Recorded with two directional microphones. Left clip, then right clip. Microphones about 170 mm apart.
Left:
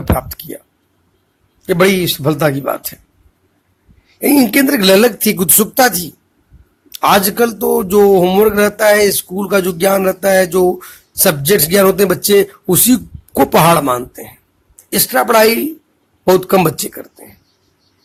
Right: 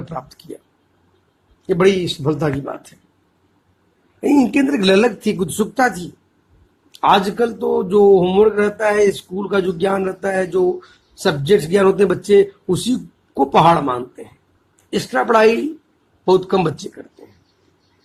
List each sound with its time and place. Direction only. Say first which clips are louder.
0.0 s a sound: left 11 dB; 45° left (ahead or behind)
1.6 s a man's voice: left 3 dB; 50° left (ahead or behind)
4.2 s music: left 4 dB; 30° left (ahead or behind)
7.0 s music: left 3 dB; 40° left (ahead or behind)
12.6 s music: left 7 dB; 45° left (ahead or behind)